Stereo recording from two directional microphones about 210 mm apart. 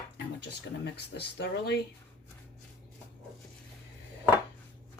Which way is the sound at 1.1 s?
55° left (ahead or behind).